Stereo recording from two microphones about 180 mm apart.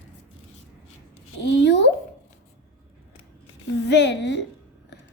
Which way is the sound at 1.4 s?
75° left (ahead or behind).